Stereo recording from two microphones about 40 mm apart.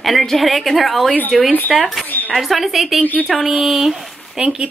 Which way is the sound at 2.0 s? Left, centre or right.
Left.